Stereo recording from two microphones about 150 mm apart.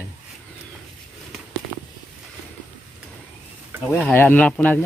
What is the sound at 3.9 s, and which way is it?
Speech, 15° left (ahead or behind).